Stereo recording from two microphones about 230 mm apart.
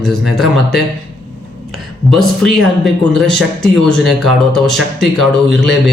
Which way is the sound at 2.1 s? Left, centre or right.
Centre.